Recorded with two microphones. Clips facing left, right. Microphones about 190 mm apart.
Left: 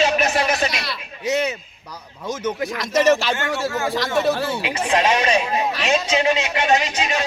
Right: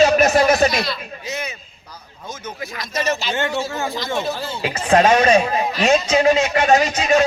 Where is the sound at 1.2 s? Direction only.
75° left (ahead or behind).